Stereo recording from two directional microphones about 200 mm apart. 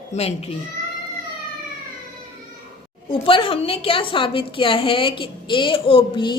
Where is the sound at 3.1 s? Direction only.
25° left (ahead or behind).